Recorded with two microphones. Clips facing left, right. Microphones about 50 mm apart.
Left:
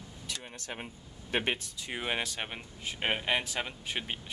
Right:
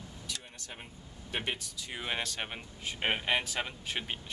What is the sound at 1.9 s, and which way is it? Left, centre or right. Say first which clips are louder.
Speech: left 3 dB; centre.